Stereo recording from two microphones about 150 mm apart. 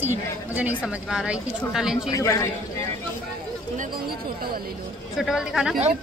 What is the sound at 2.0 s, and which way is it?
Speech, 20° left (ahead or behind).